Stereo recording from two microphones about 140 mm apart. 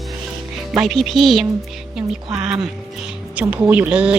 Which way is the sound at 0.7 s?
5° right (ahead or behind).